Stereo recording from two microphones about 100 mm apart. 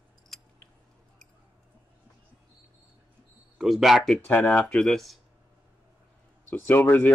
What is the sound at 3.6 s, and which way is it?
Speech, centre (ahead or behind).